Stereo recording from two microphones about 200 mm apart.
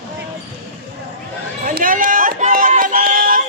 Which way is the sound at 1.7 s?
45° right (ahead or behind).